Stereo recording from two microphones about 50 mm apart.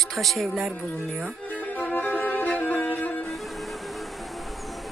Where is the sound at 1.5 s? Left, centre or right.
Left.